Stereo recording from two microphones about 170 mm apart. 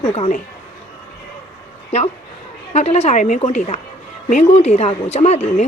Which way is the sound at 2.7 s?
40° left (ahead or behind).